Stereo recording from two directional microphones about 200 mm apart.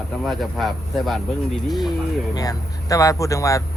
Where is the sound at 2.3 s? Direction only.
15° left (ahead or behind).